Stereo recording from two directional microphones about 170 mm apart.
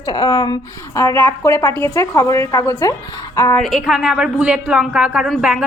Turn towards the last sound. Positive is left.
turn(degrees=-5)  # may be behind; listen again after turning